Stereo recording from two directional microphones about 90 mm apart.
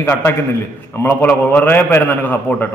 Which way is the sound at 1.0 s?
20° left (ahead or behind).